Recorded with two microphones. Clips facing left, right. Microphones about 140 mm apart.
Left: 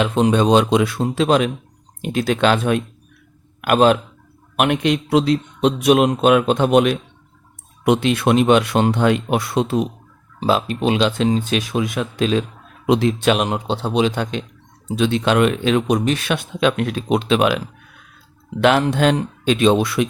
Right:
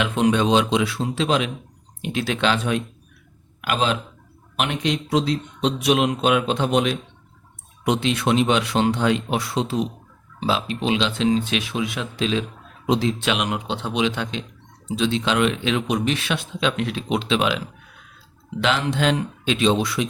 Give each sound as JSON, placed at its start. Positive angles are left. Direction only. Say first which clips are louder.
{"t": 0.0, "sound": "speech", "louder": "left 3 dB", "side_deg": 35}
{"t": 12.8, "sound": "speech", "louder": "left 5 dB", "side_deg": 60}
{"t": 18.6, "sound": "speech", "louder": "left 6 dB", "side_deg": 50}